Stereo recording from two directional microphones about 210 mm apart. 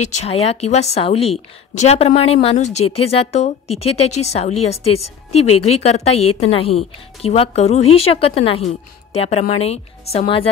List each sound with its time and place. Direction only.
0.0 s a woman's voice: 30° left (ahead or behind)